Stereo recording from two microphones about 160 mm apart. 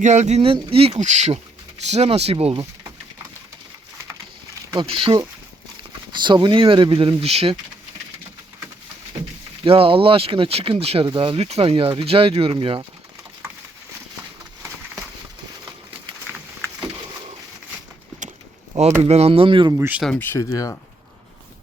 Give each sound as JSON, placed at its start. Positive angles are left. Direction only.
{"t": 0.0, "sound": "speech", "side_deg": -45}
{"t": 4.7, "sound": "speech", "side_deg": -30}
{"t": 9.6, "sound": "speech", "side_deg": -35}
{"t": 19.0, "sound": "speech", "side_deg": -40}
{"t": 20.0, "sound": "speech", "side_deg": 5}
{"t": 20.3, "sound": "speech", "side_deg": 20}